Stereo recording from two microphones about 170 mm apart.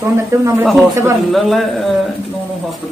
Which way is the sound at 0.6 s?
5° right (ahead or behind).